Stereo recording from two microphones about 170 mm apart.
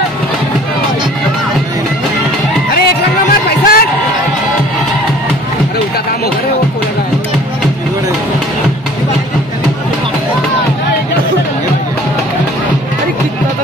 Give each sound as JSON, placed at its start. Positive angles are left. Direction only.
{"t": 2.7, "sound": "music", "side_deg": 65}